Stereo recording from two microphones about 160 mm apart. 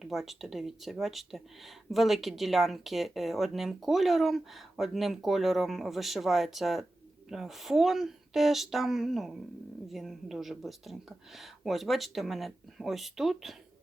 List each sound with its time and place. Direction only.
0.0 s speech: centre (ahead or behind)